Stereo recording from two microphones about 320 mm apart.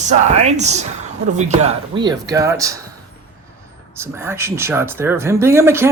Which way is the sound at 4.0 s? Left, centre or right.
Centre.